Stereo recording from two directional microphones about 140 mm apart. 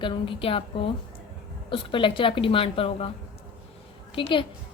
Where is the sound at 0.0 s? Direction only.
40° left (ahead or behind).